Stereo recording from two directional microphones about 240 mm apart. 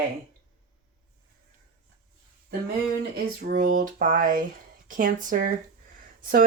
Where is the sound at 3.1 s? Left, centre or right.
Right.